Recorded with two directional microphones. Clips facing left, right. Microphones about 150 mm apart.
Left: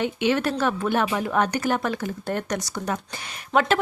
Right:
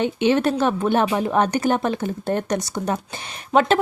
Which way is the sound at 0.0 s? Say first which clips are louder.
Right 4 dB; 25° right (ahead or behind).